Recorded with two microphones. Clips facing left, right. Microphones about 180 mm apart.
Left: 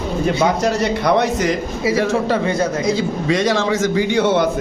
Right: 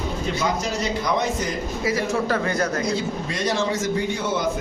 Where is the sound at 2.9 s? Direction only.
90° left; by 4.5 s 70° left (ahead or behind).